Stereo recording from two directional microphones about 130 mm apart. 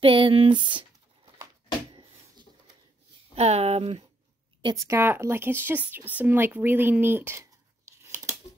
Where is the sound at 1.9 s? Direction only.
40° right (ahead or behind).